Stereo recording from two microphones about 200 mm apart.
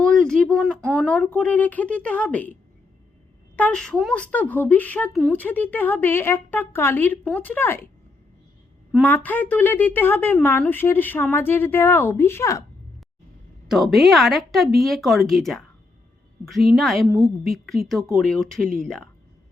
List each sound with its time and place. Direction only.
0.0 s a woman's voice: 5° left (ahead or behind)
9.0 s a woman's voice: 10° left (ahead or behind)
13.7 s speech: centre (ahead or behind)
16.7 s speech: centre (ahead or behind)
17.1 s a woman's voice: 15° right (ahead or behind)
17.4 s speech: centre (ahead or behind)